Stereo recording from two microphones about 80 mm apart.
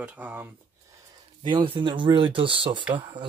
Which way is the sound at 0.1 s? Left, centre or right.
Right.